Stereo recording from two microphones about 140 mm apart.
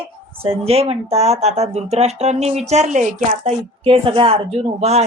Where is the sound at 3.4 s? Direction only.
45° right (ahead or behind).